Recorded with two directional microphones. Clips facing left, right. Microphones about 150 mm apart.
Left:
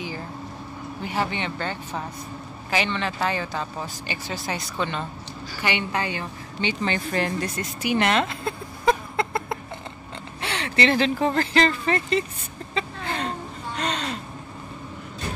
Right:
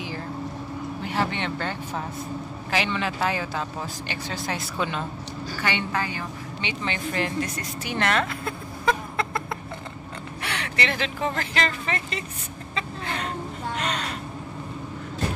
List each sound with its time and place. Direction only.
1.0 s speech: centre (ahead or behind)
5.6 s a woman's voice: 15° left (ahead or behind)
6.6 s a woman's voice: 35° left (ahead or behind)
7.8 s a woman's voice: 15° left (ahead or behind)
8.8 s a sound: 25° left (ahead or behind)
10.4 s speech: 30° left (ahead or behind)
12.7 s a sound: 30° left (ahead or behind)